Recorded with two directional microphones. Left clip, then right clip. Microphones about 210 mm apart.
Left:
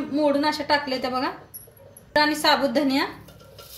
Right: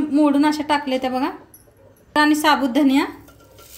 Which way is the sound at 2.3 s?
45° right (ahead or behind).